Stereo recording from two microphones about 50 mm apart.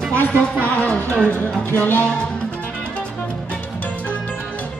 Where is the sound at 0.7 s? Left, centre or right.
Left.